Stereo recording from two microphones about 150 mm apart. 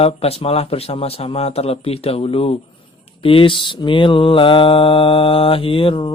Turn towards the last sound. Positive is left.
turn(degrees=35)  # may be behind; listen again after turning